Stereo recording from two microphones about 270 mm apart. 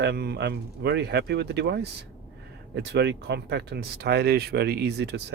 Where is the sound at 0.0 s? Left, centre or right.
Right.